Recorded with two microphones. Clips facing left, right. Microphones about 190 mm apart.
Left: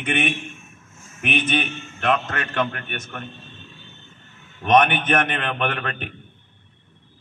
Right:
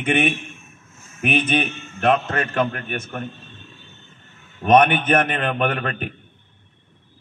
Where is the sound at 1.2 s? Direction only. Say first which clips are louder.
Right 3 dB; centre (ahead or behind).